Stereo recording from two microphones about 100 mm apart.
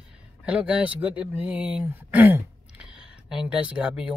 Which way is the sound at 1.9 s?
20° right (ahead or behind).